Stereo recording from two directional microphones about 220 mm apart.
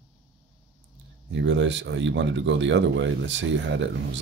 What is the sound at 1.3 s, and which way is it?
Speech, 55° right (ahead or behind).